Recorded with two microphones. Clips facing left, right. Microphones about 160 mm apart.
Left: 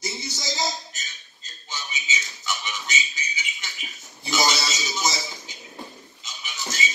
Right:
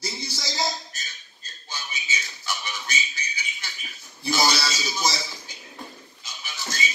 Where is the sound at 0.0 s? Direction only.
20° left (ahead or behind).